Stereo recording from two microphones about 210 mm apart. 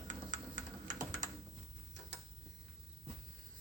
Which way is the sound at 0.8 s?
40° right (ahead or behind).